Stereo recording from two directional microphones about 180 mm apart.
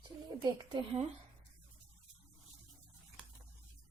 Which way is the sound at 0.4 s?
25° right (ahead or behind).